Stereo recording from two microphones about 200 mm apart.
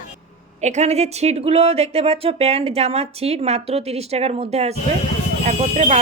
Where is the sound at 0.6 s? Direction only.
35° right (ahead or behind).